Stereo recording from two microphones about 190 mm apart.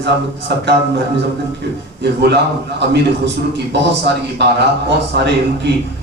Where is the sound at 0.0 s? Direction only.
65° right (ahead or behind).